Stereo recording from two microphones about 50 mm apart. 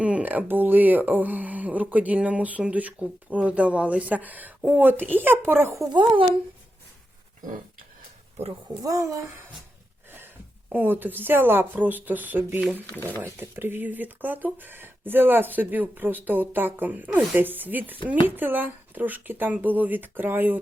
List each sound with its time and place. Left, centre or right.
0.0 s speech: right
9.0 s speech: right
10.1 s a sound: right
10.8 s speech: right
13.2 s speech: right